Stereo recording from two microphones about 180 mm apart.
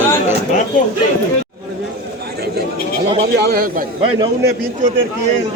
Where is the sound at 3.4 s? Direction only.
55° right (ahead or behind).